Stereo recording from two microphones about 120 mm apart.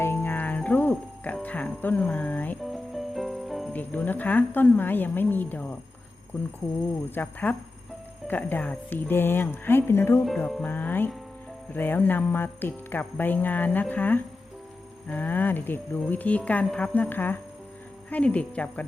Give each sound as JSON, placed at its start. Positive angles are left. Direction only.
{"t": 0.0, "sound": "music", "side_deg": 20}
{"t": 2.6, "sound": "music", "side_deg": 0}
{"t": 3.7, "sound": "jingle bell", "side_deg": 15}
{"t": 7.1, "sound": "jingle bell", "side_deg": 15}
{"t": 10.2, "sound": "speech", "side_deg": 0}
{"t": 10.6, "sound": "jingle bell", "side_deg": 15}